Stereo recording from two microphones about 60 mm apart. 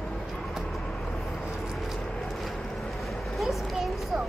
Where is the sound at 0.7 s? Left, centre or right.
Centre.